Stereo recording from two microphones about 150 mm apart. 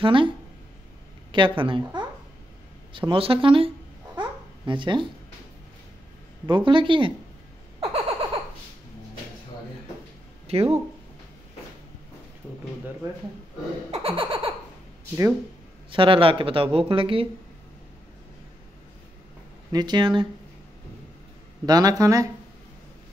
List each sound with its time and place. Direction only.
0.0 s speech: 35° right (ahead or behind)
1.3 s speech: 35° right (ahead or behind)
4.2 s babbling: 35° right (ahead or behind)
6.4 s speech: 35° right (ahead or behind)
7.8 s a sound: 40° right (ahead or behind)
10.4 s a sound: 40° right (ahead or behind)
13.9 s speech: 40° right (ahead or behind)
15.9 s speech: 35° right (ahead or behind)
19.7 s speech: 30° right (ahead or behind)
21.6 s speech: 25° right (ahead or behind)